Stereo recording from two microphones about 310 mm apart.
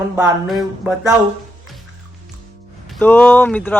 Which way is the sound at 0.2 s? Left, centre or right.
Centre.